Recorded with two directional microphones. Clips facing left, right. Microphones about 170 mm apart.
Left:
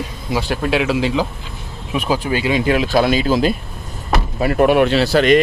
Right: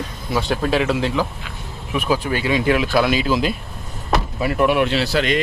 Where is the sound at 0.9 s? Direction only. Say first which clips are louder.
Left 3 dB; 15° left (ahead or behind).